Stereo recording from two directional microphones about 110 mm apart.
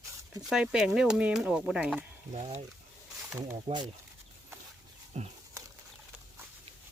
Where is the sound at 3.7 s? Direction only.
90° right.